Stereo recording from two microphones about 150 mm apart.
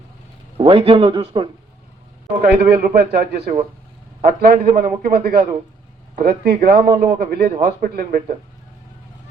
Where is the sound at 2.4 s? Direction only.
90° right.